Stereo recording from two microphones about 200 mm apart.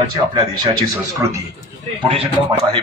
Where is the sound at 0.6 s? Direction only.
15° right (ahead or behind).